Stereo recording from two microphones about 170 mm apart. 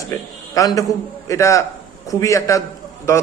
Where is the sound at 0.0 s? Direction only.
20° left (ahead or behind).